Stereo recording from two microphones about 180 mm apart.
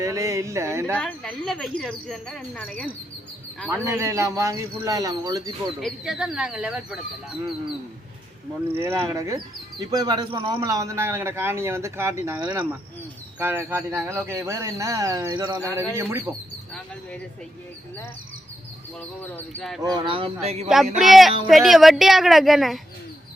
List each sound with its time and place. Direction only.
0.0 s a man's voice: 15° right (ahead or behind)
0.9 s speech: 5° left (ahead or behind)
3.7 s a man's voice: 15° right (ahead or behind)
5.8 s speech: centre (ahead or behind)
8.7 s a man's voice: 15° right (ahead or behind)
16.0 s a man's voice: 15° right (ahead or behind)
19.2 s speech: centre (ahead or behind)
19.8 s speech: 25° right (ahead or behind)
21.0 s speech: centre (ahead or behind)